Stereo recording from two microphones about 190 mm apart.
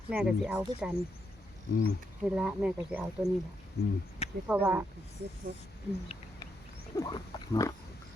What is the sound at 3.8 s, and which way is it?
Speech, 55° left (ahead or behind).